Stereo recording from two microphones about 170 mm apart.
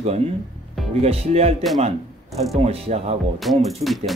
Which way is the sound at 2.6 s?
40° right (ahead or behind).